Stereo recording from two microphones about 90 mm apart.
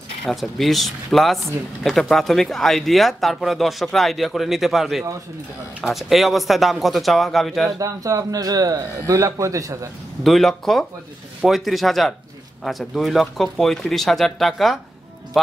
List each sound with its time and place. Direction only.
0.2 s speech: centre (ahead or behind)
7.8 s a man's voice: 40° right (ahead or behind)
10.2 s speech: 5° left (ahead or behind)